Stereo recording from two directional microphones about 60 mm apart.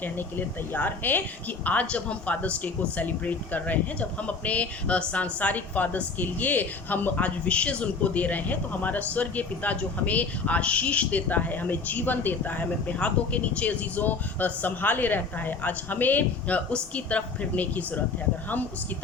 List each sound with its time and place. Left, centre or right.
0.0 s a woman's voice: left